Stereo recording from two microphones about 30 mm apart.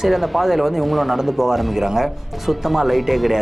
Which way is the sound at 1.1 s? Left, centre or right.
Centre.